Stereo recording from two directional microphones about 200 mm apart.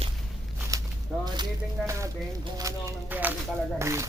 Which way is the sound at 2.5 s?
10° right (ahead or behind).